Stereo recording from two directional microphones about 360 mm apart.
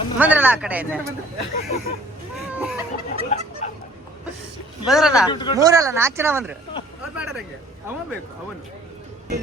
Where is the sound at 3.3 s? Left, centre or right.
Centre.